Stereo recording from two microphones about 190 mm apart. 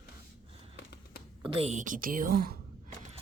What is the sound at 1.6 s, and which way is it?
Speech, 40° right (ahead or behind).